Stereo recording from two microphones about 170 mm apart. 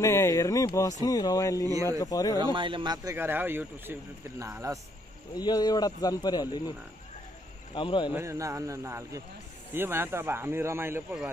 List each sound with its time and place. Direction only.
0.0 s speech: 15° left (ahead or behind)
2.4 s speech: 30° right (ahead or behind)
5.3 s speech: 25° left (ahead or behind)
7.7 s speech: 30° left (ahead or behind)
8.1 s speech: 15° right (ahead or behind)